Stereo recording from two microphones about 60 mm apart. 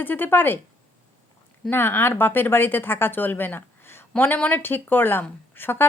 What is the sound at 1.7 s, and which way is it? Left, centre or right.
A woman's voice, left.